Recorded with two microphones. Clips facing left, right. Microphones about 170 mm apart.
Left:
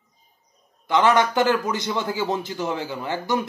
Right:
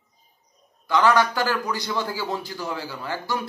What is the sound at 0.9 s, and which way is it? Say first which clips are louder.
A man's voice: left 1 dB; 20° left (ahead or behind).